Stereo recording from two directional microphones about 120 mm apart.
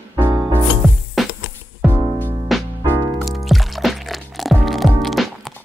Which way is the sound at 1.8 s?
15° left (ahead or behind).